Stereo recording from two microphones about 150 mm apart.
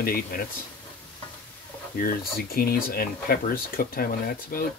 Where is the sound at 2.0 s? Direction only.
85° left.